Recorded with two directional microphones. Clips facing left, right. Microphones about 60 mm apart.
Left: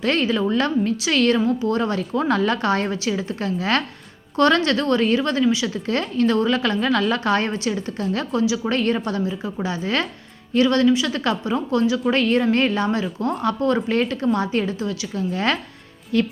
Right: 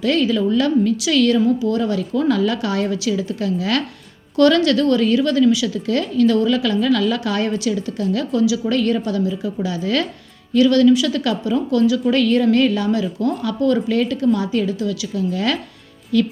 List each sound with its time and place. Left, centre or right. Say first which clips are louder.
0.0 s speech: right 3 dB; left